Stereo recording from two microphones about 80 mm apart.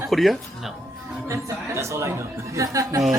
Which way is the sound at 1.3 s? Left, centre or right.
Right.